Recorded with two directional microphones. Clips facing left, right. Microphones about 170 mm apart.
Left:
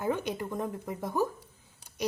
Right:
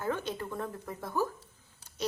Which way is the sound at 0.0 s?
15° left (ahead or behind).